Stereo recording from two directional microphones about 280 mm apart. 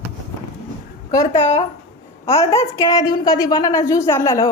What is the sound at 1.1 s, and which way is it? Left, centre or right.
A woman's voice, centre.